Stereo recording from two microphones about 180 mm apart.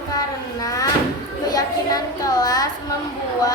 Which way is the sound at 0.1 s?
20° left (ahead or behind).